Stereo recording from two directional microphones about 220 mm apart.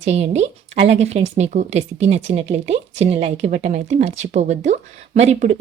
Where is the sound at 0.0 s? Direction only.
30° right (ahead or behind).